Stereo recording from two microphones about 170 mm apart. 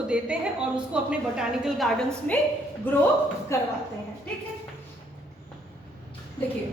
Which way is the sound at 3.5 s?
15° left (ahead or behind).